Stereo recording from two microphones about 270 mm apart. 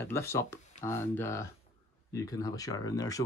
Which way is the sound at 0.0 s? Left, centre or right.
Centre.